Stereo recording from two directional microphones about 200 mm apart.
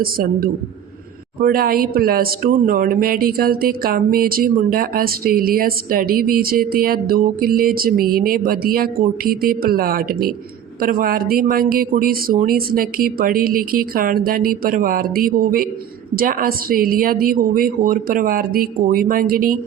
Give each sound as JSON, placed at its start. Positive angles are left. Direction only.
{"t": 0.0, "sound": "speech", "side_deg": -45}